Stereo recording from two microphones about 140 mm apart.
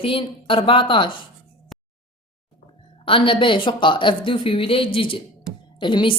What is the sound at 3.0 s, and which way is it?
Speech, 40° left (ahead or behind).